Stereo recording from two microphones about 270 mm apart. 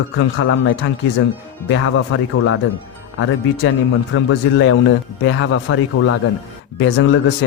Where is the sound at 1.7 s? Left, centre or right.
Left.